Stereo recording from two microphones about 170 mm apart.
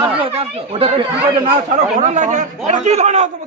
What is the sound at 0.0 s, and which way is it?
Chatter, 35° right (ahead or behind).